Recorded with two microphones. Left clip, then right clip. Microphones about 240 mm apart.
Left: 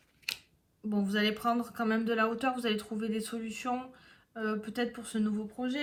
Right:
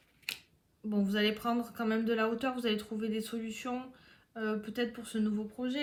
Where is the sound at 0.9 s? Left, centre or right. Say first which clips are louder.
Left 1 dB; left.